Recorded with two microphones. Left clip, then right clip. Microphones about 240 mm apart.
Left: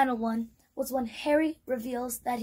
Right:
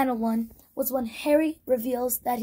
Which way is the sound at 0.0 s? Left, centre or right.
Right.